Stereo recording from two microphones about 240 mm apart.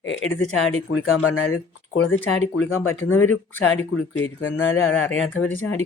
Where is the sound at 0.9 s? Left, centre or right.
Left.